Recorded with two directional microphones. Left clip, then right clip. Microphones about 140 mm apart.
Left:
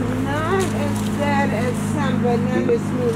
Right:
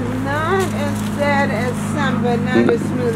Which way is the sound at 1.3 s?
40° right (ahead or behind).